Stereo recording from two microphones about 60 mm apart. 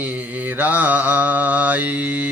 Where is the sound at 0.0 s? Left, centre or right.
Right.